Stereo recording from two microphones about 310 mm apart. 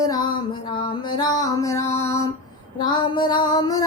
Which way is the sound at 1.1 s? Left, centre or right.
Centre.